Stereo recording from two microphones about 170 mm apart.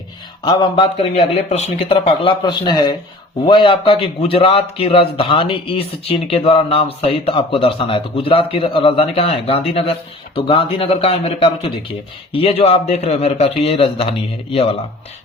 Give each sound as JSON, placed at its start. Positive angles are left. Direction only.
{"t": 0.4, "sound": "a man's voice", "side_deg": 30}